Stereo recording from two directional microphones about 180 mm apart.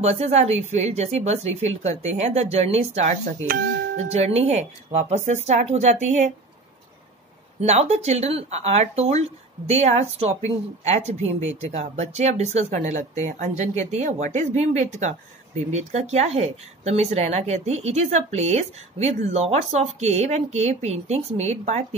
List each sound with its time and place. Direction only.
0.0 s speech: 35° right (ahead or behind)
7.6 s speech: 35° right (ahead or behind)